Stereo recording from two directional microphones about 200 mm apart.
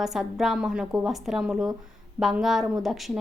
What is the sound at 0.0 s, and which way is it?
Speech, centre (ahead or behind).